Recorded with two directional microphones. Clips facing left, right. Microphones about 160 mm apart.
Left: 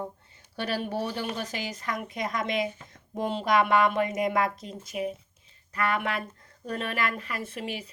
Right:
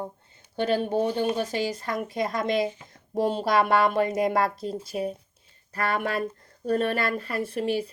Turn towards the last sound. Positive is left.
turn(degrees=-35)  # may be behind; listen again after turning